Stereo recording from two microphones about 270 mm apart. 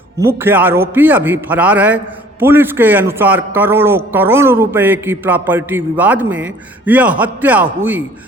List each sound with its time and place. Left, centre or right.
0.4 s a man's voice: centre